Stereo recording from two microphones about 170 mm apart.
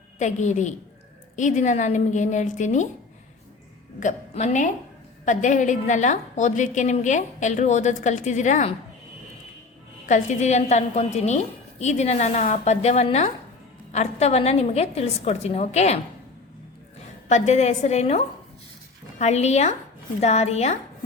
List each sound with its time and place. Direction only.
0.2 s a woman's voice: 45° left (ahead or behind)
4.0 s a woman's voice: 45° left (ahead or behind)
10.1 s a woman's voice: 45° left (ahead or behind)
17.2 s a woman's voice: 40° left (ahead or behind)
19.2 s a woman's voice: 40° left (ahead or behind)